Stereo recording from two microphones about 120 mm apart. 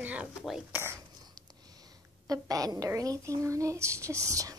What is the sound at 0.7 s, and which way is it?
Speech, 20° right (ahead or behind).